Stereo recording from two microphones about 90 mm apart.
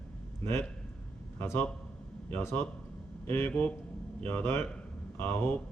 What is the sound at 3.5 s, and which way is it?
A man's voice, 15° left (ahead or behind).